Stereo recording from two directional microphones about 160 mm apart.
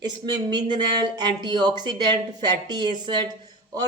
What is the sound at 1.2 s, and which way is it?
Speech, 25° right (ahead or behind).